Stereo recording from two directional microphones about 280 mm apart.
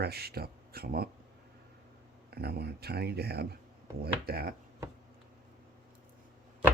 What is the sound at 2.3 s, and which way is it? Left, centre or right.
Speech, right.